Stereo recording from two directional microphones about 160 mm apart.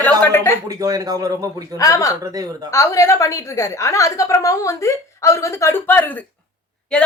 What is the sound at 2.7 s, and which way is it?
A woman's voice, 20° left (ahead or behind).